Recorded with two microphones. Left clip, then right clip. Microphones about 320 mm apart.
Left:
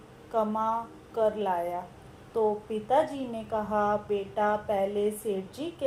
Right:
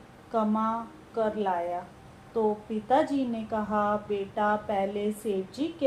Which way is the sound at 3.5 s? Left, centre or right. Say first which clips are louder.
Left 1 dB; left.